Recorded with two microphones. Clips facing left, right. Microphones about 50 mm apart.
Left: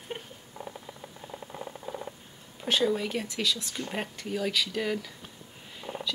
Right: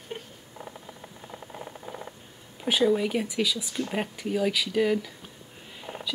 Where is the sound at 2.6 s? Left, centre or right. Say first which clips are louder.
Right 4 dB; centre.